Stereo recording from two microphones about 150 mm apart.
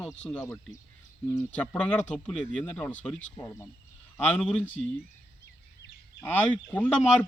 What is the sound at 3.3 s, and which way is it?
Speech, 25° left (ahead or behind).